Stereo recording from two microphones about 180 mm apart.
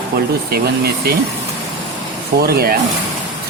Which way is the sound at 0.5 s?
60° right (ahead or behind).